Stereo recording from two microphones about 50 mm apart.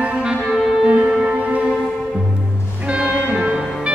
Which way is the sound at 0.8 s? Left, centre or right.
Centre.